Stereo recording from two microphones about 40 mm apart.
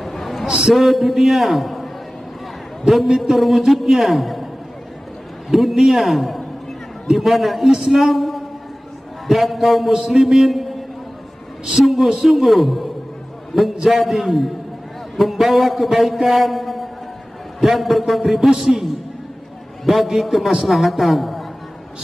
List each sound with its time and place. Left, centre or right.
0.0 s a sound: centre
0.5 s a man's voice: centre
0.7 s a man's voice: centre
5.5 s a man's voice: centre
7.7 s a woman's voice: centre
11.8 s a man's voice: centre
18.5 s a man's voice: centre
19.8 s a man's voice: centre